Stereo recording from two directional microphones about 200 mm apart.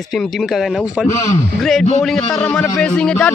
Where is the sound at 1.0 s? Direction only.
15° left (ahead or behind).